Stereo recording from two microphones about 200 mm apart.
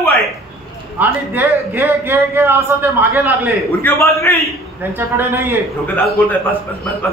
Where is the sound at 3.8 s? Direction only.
15° left (ahead or behind).